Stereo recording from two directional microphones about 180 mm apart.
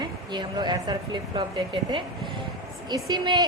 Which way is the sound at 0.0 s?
25° right (ahead or behind).